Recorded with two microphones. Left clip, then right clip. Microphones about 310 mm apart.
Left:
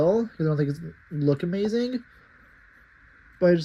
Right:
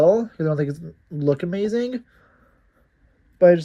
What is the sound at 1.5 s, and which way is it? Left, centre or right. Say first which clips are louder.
Speech: right 3 dB; centre.